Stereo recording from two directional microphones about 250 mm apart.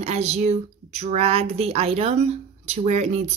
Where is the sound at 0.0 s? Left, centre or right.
Right.